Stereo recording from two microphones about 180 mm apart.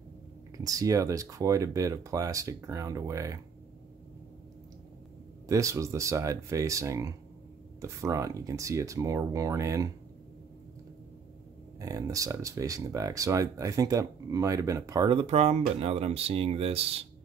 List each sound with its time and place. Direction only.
0.7 s speech: 20° right (ahead or behind)
5.5 s speech: 15° right (ahead or behind)
11.8 s speech: 20° right (ahead or behind); by 17.0 s 35° right (ahead or behind)